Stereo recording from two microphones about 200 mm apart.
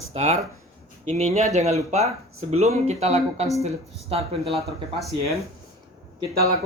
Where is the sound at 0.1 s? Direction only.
30° right (ahead or behind).